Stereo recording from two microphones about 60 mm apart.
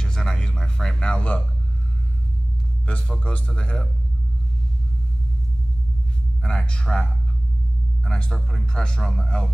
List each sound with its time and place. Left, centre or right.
0.0 s speech: centre
3.2 s speech: left
6.4 s speech: centre